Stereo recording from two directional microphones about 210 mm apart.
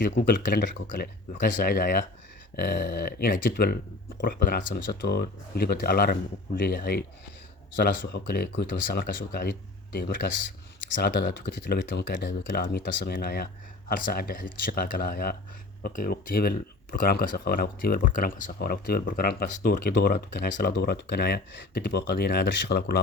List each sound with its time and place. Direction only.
0.2 s speech: 40° left (ahead or behind)